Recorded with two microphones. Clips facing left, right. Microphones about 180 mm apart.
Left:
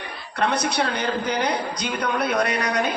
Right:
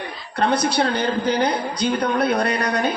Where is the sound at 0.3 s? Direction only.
30° right (ahead or behind).